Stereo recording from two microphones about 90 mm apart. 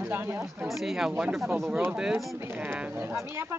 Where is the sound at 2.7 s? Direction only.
15° right (ahead or behind).